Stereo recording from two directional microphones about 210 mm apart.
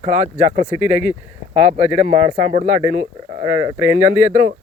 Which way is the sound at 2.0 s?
35° right (ahead or behind).